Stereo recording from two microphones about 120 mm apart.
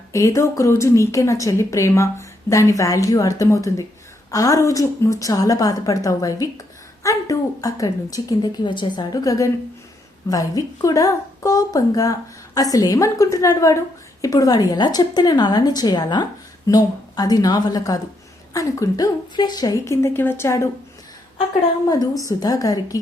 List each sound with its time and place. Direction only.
0.1 s a woman's voice: 25° left (ahead or behind)
22.3 s a woman's voice: 30° left (ahead or behind)